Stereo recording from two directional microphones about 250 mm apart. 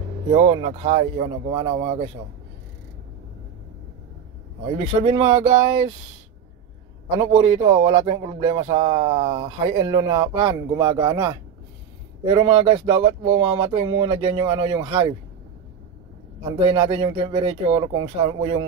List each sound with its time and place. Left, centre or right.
0.3 s speech: right
4.6 s speech: right
7.2 s speech: right
16.5 s speech: right